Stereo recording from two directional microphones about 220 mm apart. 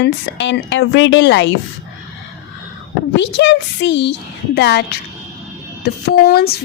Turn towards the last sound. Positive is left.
turn(degrees=45)  # may be behind; listen again after turning